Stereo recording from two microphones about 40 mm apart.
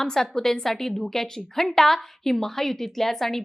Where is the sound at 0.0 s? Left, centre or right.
Centre.